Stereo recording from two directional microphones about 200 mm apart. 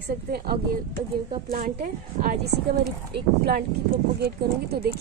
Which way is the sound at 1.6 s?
45° right (ahead or behind).